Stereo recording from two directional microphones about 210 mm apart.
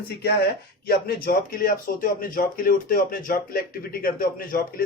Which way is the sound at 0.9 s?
45° left (ahead or behind).